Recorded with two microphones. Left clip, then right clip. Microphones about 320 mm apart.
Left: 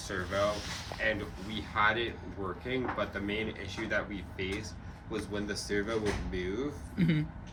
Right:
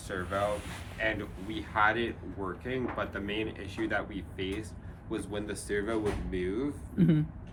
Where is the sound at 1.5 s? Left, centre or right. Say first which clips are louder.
Right 1 dB; right.